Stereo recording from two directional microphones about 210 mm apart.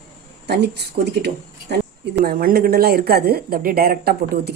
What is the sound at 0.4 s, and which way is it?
Speech, 50° right (ahead or behind).